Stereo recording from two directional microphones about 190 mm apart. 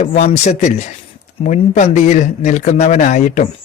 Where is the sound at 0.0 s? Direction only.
35° left (ahead or behind).